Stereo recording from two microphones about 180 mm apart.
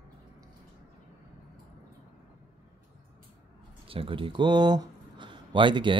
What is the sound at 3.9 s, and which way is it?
Speech, 30° right (ahead or behind).